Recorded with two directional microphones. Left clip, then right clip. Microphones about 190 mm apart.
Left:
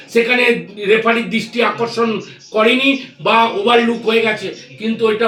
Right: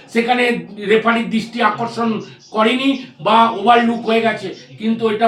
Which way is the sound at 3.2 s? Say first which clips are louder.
Right 1 dB; 20° right (ahead or behind).